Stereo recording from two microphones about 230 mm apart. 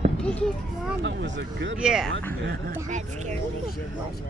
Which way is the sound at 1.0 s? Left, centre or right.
Right.